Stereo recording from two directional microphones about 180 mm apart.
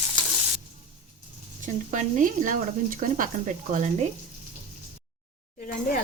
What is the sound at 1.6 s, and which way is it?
Speech, 45° right (ahead or behind).